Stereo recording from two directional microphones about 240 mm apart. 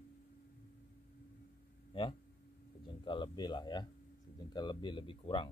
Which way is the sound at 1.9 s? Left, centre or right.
Left.